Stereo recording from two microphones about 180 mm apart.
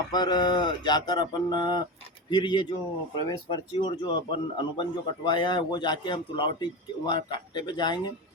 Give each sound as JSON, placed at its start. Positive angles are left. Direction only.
{"t": 0.1, "sound": "a man's voice", "side_deg": 25}